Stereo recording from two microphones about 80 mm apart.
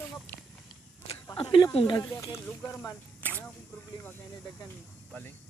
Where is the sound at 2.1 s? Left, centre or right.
Left.